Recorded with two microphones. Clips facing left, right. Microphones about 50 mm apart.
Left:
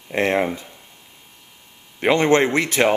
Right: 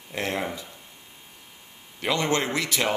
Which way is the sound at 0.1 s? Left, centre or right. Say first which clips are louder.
Left 9 dB; left.